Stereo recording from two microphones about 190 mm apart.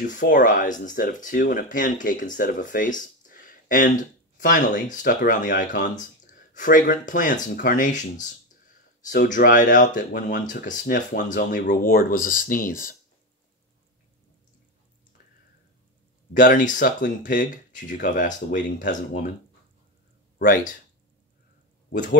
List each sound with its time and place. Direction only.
0.0 s speech: 45° left (ahead or behind)
16.3 s speech: 45° left (ahead or behind)
20.3 s speech: 50° left (ahead or behind)